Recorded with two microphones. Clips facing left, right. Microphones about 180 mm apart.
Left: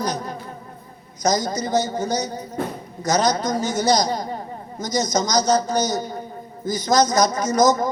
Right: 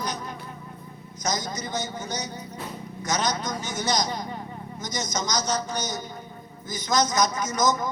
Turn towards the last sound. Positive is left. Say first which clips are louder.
# left 7 dB
turn(degrees=40)  # may be behind; listen again after turning